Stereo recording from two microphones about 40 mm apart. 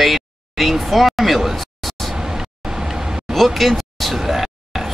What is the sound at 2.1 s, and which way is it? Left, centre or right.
Vehicle, centre.